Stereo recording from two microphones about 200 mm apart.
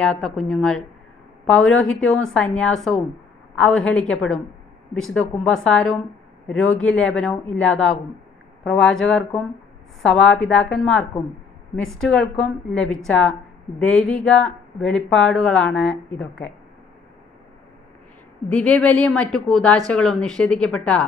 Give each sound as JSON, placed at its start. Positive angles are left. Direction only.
{"t": 0.0, "sound": "speech", "side_deg": 0}
{"t": 18.5, "sound": "speech", "side_deg": 5}